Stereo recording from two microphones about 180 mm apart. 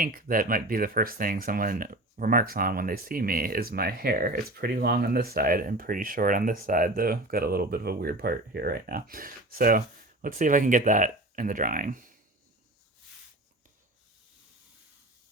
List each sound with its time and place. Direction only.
0.0 s speech: 50° right (ahead or behind)